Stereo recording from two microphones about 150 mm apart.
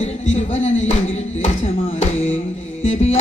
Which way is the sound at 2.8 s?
50° left (ahead or behind).